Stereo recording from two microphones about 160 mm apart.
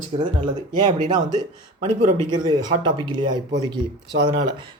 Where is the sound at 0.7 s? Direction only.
25° right (ahead or behind).